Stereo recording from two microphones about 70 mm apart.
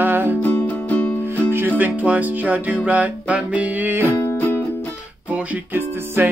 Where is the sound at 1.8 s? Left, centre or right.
Right.